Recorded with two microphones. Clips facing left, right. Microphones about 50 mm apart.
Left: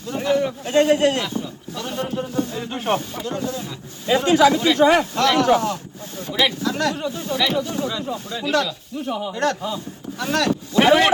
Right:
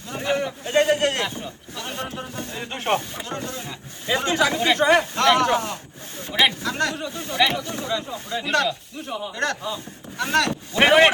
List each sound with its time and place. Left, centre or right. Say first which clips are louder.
0.1 s speech: left 4 dB; right
10.2 s speech: even; right